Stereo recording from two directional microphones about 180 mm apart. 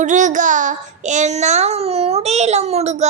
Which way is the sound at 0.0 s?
45° right (ahead or behind).